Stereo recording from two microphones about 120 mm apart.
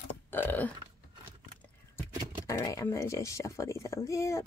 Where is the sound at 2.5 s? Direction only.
25° left (ahead or behind).